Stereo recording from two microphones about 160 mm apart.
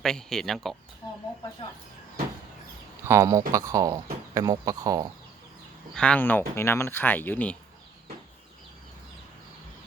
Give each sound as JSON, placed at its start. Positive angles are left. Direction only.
{"t": 0.0, "sound": "speech", "side_deg": 5}
{"t": 3.1, "sound": "speech", "side_deg": -20}
{"t": 5.9, "sound": "speech", "side_deg": 5}